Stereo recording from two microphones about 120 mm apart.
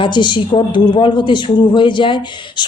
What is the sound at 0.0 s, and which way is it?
A woman's voice, 40° left (ahead or behind).